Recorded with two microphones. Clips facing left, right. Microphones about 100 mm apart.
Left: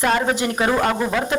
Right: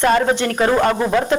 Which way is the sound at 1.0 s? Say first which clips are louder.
Right 4 dB; 20° right (ahead or behind).